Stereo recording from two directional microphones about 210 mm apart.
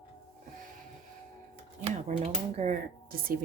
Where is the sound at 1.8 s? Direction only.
30° right (ahead or behind).